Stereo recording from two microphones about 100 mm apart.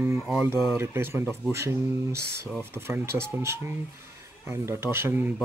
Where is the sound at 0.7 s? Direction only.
25° right (ahead or behind).